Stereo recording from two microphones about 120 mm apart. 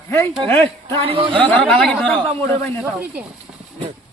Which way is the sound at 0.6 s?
50° right (ahead or behind).